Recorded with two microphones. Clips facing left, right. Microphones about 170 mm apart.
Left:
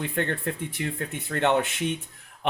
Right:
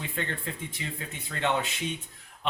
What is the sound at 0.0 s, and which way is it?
Speech, 60° left (ahead or behind).